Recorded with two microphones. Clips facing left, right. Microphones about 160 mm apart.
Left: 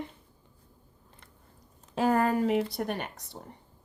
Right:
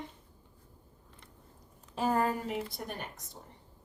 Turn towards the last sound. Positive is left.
turn(degrees=70)  # may be behind; listen again after turning